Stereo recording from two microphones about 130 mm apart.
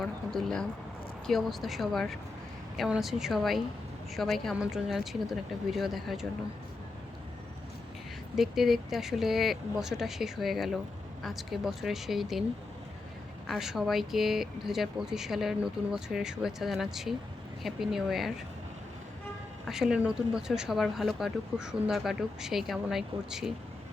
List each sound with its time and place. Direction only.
0.0 s speech: 5° left (ahead or behind)
8.4 s speech: centre (ahead or behind)
13.5 s speech: 5° right (ahead or behind)
19.6 s speech: 5° right (ahead or behind)